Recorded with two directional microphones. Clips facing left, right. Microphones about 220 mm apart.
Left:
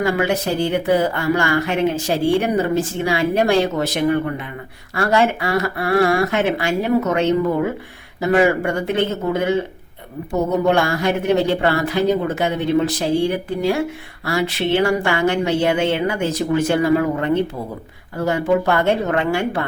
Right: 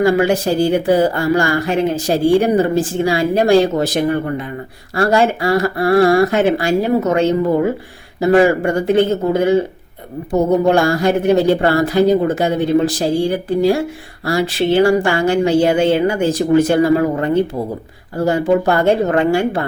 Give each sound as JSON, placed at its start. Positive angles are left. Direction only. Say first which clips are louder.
{"t": 0.0, "sound": "speech", "louder": "right 5 dB", "side_deg": -30}
{"t": 10.7, "sound": "speech", "louder": "right 4 dB", "side_deg": -35}